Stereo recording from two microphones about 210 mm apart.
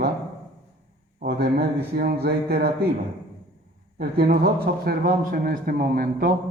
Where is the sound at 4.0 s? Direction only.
50° right (ahead or behind).